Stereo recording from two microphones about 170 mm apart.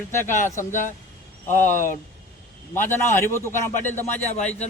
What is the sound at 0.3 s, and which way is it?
Speech, 50° left (ahead or behind).